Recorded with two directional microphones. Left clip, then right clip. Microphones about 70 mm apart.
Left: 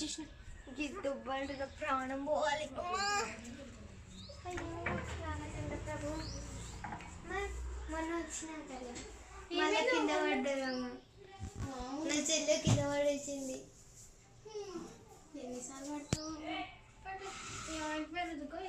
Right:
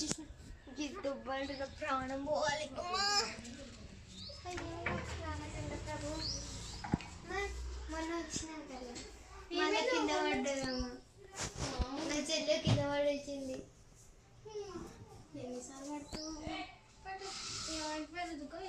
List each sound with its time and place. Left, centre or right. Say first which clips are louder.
0.8 s a woman's voice: left 1 dB; centre
14.5 s children playing: even; centre
15.4 s a woman's voice: even; centre